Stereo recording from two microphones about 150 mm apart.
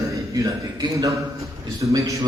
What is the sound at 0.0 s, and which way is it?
A man's voice, 20° right (ahead or behind).